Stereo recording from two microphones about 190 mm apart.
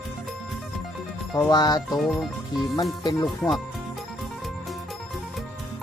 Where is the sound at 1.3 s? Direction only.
20° left (ahead or behind).